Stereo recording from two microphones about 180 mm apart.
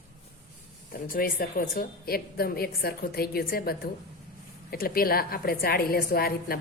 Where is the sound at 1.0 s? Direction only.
55° left (ahead or behind).